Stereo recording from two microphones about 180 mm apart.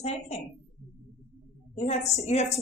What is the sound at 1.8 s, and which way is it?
Speech, 35° left (ahead or behind).